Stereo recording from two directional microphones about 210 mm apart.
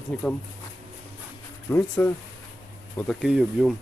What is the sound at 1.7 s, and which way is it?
Speech, 10° left (ahead or behind).